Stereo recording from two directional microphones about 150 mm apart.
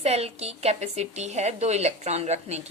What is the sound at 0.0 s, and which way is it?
A woman's voice, 45° right (ahead or behind).